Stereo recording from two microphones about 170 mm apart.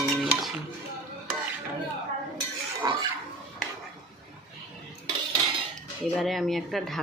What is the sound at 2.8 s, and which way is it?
Pig, 20° right (ahead or behind).